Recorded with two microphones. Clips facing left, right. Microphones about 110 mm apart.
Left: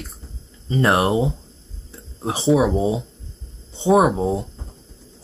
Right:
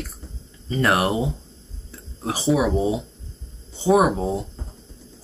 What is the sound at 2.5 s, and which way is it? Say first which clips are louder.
Speech: left 3 dB; 25° left (ahead or behind).